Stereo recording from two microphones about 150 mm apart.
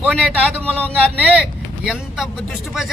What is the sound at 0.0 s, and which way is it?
Speech, 10° right (ahead or behind).